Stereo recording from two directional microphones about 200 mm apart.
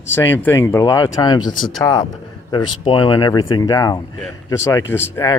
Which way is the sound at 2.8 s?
20° left (ahead or behind).